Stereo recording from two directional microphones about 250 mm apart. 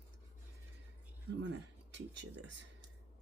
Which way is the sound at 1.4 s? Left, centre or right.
Right.